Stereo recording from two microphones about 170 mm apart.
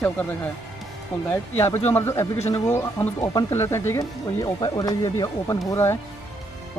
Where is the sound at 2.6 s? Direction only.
15° left (ahead or behind).